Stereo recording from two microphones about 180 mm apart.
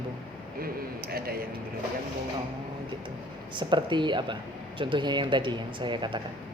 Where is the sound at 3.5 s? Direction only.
25° right (ahead or behind).